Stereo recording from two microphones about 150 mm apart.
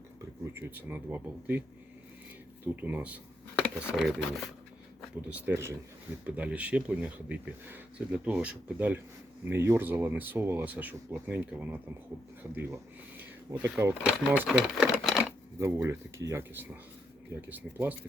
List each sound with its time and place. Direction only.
0.5 s speech: 15° right (ahead or behind)
2.8 s speech: 10° right (ahead or behind)
3.5 s a sound: 5° right (ahead or behind)
5.3 s speech: 15° right (ahead or behind)
15.5 s speech: 20° right (ahead or behind)